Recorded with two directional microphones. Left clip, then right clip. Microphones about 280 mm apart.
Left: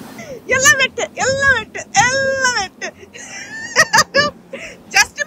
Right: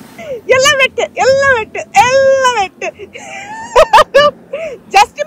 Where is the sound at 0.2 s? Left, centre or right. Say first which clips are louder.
Right 5 dB; centre.